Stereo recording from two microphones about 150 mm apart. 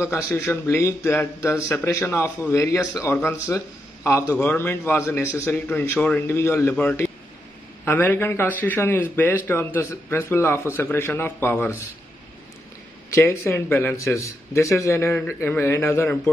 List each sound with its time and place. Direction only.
0.3 s speech: 15° left (ahead or behind)
13.1 s speech: 20° left (ahead or behind)